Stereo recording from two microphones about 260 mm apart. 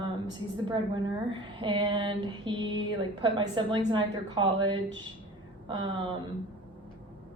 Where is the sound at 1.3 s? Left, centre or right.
Centre.